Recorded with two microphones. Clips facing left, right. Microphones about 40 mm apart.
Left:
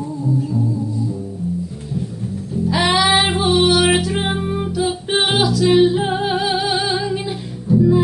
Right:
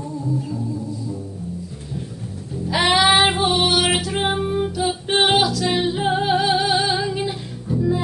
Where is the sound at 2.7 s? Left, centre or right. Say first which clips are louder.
Even; centre.